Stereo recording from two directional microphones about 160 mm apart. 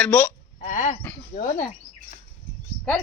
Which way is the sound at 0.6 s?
50° left (ahead or behind).